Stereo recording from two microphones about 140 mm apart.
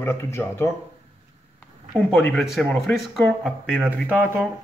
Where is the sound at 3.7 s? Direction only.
10° right (ahead or behind).